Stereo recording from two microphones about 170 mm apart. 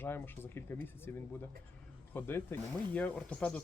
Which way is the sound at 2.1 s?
15° left (ahead or behind).